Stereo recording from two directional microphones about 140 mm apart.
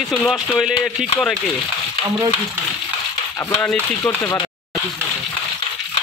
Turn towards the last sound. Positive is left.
turn(degrees=20)  # may be behind; listen again after turning